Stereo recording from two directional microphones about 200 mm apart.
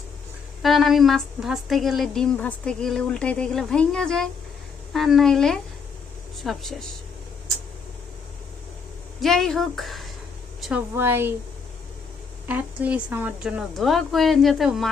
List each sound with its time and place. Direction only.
0.6 s a woman's voice: centre (ahead or behind)
9.2 s a woman's voice: centre (ahead or behind)
10.9 s speech: 10° right (ahead or behind)
12.5 s a woman's voice: 5° right (ahead or behind)